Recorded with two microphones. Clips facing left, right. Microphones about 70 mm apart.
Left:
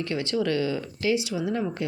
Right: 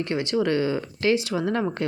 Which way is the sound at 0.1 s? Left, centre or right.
Right.